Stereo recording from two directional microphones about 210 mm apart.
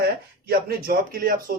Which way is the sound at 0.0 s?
45° right (ahead or behind).